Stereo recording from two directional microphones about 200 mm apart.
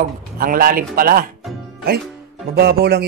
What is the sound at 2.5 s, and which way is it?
Speech, 50° right (ahead or behind).